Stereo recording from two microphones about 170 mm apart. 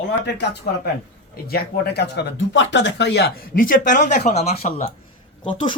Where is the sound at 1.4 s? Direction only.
70° left (ahead or behind); by 4.5 s 40° left (ahead or behind).